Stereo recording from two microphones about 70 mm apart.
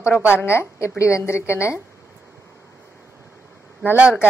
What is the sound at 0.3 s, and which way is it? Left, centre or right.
A woman's voice, left.